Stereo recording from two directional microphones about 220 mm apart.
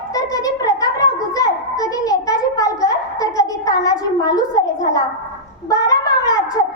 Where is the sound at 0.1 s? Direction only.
15° left (ahead or behind).